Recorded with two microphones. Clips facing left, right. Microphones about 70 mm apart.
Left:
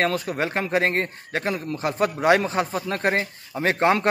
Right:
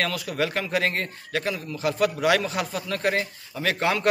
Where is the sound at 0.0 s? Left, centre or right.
Left.